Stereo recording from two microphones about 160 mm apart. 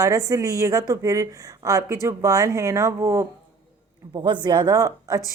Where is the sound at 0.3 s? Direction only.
20° right (ahead or behind).